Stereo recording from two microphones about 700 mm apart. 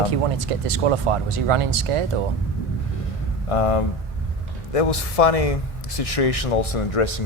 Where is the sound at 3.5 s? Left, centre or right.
Left.